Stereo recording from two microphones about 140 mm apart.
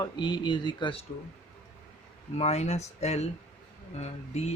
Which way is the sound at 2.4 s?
50° left (ahead or behind).